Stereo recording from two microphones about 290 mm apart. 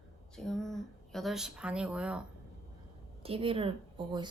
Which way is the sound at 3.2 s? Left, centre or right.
Centre.